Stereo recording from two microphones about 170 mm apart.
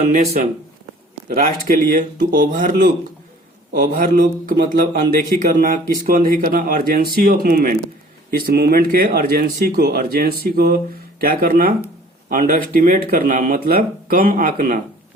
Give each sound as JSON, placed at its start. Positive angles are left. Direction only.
{"t": 0.4, "sound": "speech", "side_deg": -45}
{"t": 1.6, "sound": "speech", "side_deg": -55}